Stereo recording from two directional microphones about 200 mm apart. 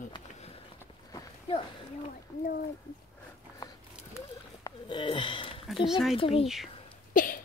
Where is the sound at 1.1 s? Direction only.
25° left (ahead or behind).